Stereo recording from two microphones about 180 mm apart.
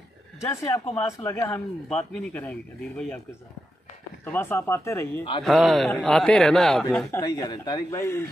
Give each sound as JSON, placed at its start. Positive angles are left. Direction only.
{"t": 0.7, "sound": "a man's voice", "side_deg": 15}
{"t": 4.2, "sound": "a man's voice", "side_deg": 10}
{"t": 5.4, "sound": "a man's voice", "side_deg": 0}
{"t": 7.2, "sound": "speech", "side_deg": 20}